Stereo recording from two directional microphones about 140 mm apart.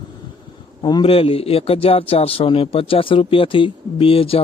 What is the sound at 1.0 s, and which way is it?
Speech, 45° left (ahead or behind).